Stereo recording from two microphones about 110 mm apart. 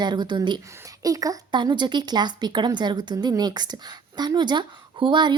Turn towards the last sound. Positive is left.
turn(degrees=-45)  # may be behind; listen again after turning